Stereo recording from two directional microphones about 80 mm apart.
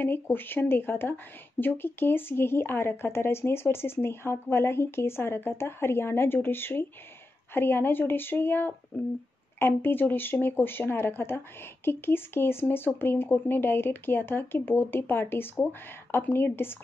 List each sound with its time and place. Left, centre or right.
0.0 s speech: left